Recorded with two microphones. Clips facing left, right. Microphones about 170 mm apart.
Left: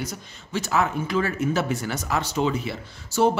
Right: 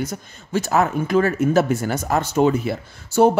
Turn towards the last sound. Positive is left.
turn(degrees=-50)  # may be behind; listen again after turning